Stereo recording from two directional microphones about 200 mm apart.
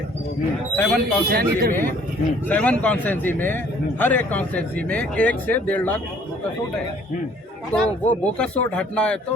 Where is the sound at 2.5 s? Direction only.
5° left (ahead or behind).